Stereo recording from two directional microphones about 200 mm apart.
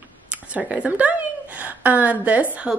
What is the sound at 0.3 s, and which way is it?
A woman's voice, 5° right (ahead or behind).